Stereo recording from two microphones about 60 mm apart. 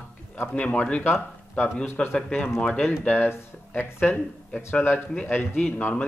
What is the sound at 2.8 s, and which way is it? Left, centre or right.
Speech, left.